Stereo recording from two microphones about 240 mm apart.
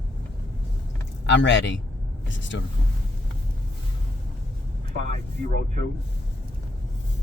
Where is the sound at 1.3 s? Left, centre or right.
Left.